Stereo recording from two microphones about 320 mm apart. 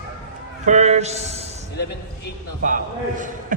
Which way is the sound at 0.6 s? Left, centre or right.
Right.